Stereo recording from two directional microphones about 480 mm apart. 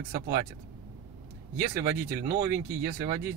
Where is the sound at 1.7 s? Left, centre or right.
Centre.